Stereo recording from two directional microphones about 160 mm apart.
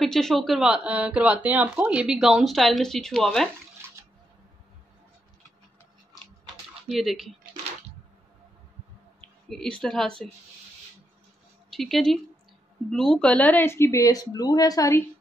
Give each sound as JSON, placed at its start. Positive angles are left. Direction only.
{"t": 0.0, "sound": "speech", "side_deg": 0}
{"t": 6.9, "sound": "speech", "side_deg": 0}
{"t": 9.5, "sound": "speech", "side_deg": 5}
{"t": 11.7, "sound": "speech", "side_deg": 0}